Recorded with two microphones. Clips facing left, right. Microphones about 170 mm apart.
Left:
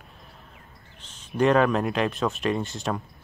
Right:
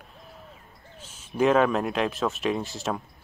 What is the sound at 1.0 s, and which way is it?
Speech, 5° right (ahead or behind).